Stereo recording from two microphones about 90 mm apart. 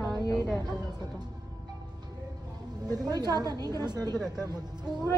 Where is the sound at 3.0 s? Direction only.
45° right (ahead or behind).